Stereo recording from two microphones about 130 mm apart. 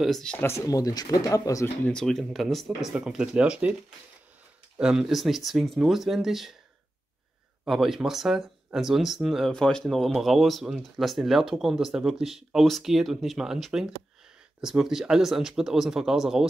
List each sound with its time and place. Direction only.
0.0 s speech: 5° left (ahead or behind)
0.5 s speech: 25° left (ahead or behind)
1.9 s speech: 5° left (ahead or behind)
4.7 s speech: 5° right (ahead or behind)
7.6 s speech: 5° right (ahead or behind)